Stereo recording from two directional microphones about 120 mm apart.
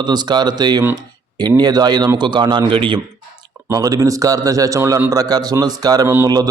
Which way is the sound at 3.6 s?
30° right (ahead or behind).